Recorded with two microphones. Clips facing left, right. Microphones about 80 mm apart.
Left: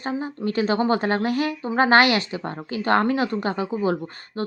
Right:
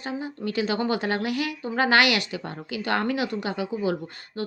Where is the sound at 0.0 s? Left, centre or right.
Left.